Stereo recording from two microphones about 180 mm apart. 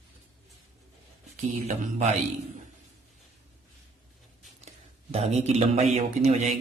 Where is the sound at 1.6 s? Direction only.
40° right (ahead or behind).